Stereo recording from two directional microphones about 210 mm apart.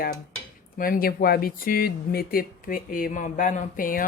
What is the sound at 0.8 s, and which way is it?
A woman's voice, 45° left (ahead or behind).